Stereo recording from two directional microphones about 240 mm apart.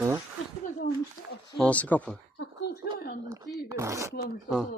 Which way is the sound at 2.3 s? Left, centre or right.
Left.